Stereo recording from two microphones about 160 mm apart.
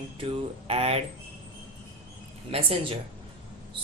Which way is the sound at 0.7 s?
40° right (ahead or behind).